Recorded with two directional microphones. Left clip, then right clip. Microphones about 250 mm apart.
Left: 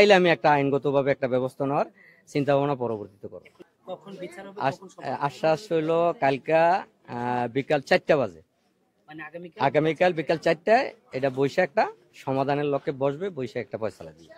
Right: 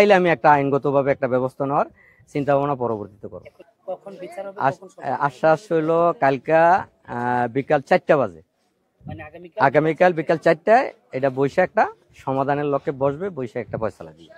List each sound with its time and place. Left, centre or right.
0.0 s speech: centre
4.6 s speech: centre
9.0 s a man's voice: left
9.6 s speech: centre